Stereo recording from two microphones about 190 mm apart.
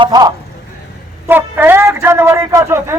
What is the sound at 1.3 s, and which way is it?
A man's voice, 10° right (ahead or behind).